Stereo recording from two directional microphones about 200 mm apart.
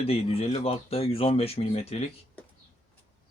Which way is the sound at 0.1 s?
30° left (ahead or behind).